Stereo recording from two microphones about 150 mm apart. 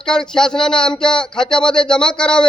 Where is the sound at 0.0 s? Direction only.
5° left (ahead or behind).